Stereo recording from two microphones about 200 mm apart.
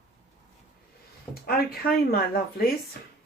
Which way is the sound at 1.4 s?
50° left (ahead or behind).